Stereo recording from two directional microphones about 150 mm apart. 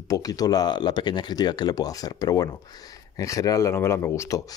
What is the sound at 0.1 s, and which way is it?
Speech, 25° left (ahead or behind).